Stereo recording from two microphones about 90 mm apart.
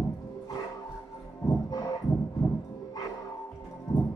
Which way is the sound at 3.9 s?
45° left (ahead or behind).